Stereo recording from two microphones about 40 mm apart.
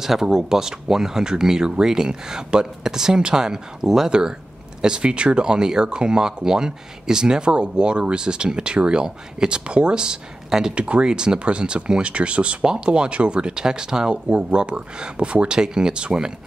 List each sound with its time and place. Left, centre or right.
0.0 s speech: centre
10.7 s speech: right
14.1 s speech: right